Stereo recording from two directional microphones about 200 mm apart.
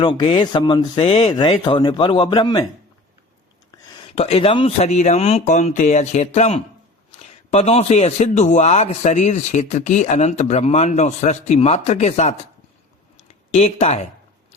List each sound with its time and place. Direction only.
0.0 s speech: 25° left (ahead or behind)
3.8 s a man's voice: 25° left (ahead or behind)
13.1 s a sound: 30° left (ahead or behind)